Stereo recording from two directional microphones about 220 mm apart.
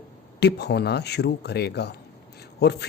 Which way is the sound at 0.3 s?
50° left (ahead or behind).